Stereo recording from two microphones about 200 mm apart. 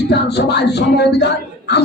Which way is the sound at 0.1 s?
55° left (ahead or behind).